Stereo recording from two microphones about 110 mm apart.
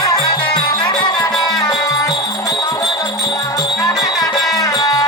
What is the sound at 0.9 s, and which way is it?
Music, 40° left (ahead or behind).